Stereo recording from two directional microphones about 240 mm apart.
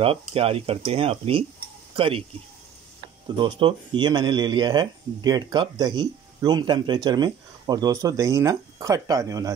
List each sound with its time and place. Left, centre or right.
0.0 s speech: right
3.3 s speech: right